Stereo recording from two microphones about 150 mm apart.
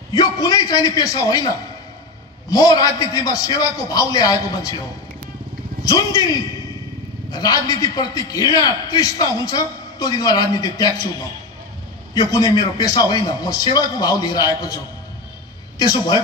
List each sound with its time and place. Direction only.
0.1 s a man's voice: 25° left (ahead or behind)
2.5 s a man's voice: 25° left (ahead or behind)
5.9 s a man's voice: 25° left (ahead or behind)
12.1 s a man's voice: 25° left (ahead or behind)
15.8 s a man's voice: 25° left (ahead or behind)